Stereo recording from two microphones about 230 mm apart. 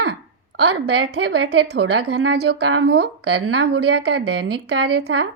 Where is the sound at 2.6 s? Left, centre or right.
Right.